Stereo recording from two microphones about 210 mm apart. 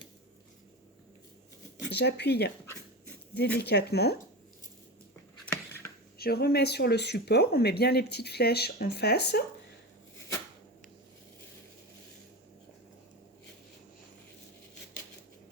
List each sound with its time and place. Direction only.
1.8 s speech: 50° left (ahead or behind)
3.6 s speech: 50° left (ahead or behind)
6.1 s speech: 45° left (ahead or behind)